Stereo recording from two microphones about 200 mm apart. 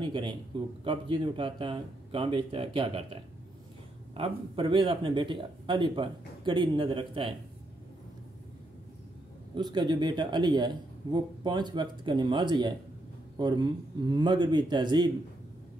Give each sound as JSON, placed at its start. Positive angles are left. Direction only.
{"t": 0.0, "sound": "speech", "side_deg": -25}
{"t": 9.6, "sound": "speech", "side_deg": -20}